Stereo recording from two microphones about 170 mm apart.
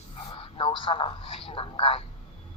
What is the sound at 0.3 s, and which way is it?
Speech, 30° left (ahead or behind).